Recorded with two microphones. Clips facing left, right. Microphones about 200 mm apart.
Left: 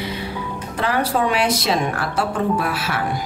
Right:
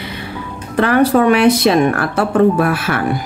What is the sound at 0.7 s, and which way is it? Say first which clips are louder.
Speech: right 9 dB; 60° right (ahead or behind).